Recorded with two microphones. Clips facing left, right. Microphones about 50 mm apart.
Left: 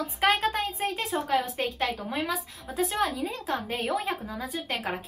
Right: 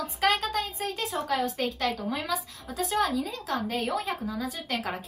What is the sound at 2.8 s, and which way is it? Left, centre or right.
A woman's voice, centre.